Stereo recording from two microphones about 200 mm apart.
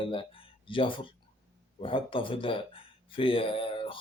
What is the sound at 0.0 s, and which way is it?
Speech, 25° left (ahead or behind).